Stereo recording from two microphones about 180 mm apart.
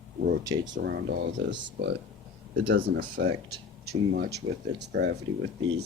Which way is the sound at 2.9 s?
70° right (ahead or behind).